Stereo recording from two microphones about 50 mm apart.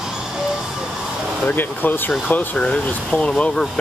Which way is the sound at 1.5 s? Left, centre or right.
Left.